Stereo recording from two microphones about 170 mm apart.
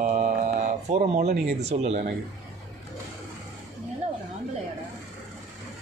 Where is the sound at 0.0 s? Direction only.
45° right (ahead or behind).